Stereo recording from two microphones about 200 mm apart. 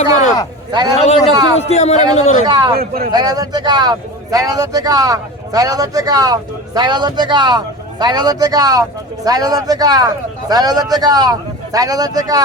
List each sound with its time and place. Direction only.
0.7 s speech: 20° right (ahead or behind)
0.9 s a man's voice: 30° left (ahead or behind)
1.3 s speech: 20° right (ahead or behind)
1.5 s a man's voice: 30° left (ahead or behind)
2.5 s speech: 20° right (ahead or behind)
2.7 s speech: 50° right (ahead or behind)
3.1 s speech: 20° right (ahead or behind)